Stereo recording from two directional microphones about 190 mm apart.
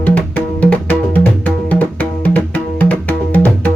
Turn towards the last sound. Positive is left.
turn(degrees=10)  # may be behind; listen again after turning